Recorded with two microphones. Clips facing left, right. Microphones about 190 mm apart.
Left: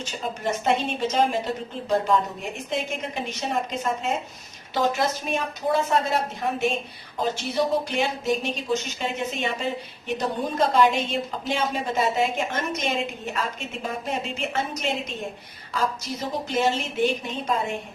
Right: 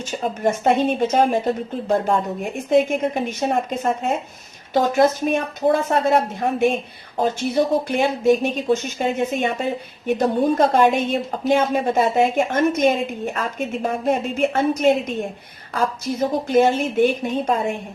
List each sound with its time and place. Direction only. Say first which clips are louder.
0.0 s a woman's voice: right 7 dB; 50° right (ahead or behind)